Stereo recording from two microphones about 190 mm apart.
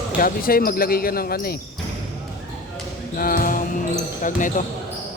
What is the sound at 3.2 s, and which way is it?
Speech, 50° left (ahead or behind).